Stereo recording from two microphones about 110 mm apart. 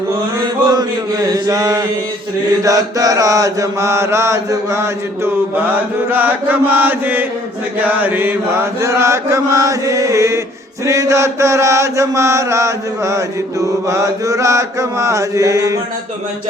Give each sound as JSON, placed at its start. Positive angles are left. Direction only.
{"t": 0.7, "sound": "chant", "side_deg": -35}
{"t": 2.6, "sound": "mantra", "side_deg": -30}